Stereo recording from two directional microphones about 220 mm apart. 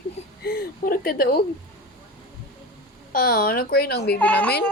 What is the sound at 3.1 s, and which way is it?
Speech, 40° left (ahead or behind).